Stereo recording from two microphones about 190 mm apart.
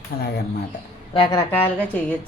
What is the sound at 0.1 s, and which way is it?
Speech, 55° left (ahead or behind).